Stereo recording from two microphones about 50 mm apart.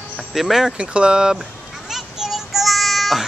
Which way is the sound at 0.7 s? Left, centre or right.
Centre.